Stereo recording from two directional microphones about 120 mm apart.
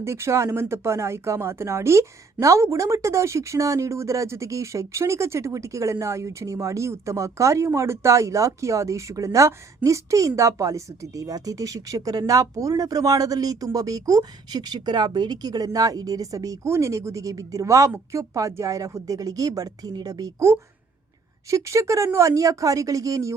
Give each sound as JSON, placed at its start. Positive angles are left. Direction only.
{"t": 0.0, "sound": "speech", "side_deg": -25}